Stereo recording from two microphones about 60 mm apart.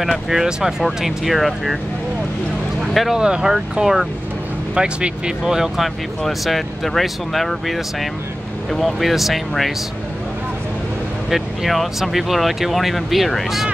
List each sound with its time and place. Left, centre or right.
0.0 s speech: centre
2.9 s speech: centre
3.2 s speech: centre
11.2 s speech: centre